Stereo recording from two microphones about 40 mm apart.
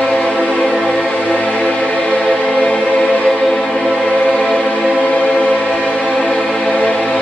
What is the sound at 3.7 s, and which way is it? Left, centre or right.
Choir, left.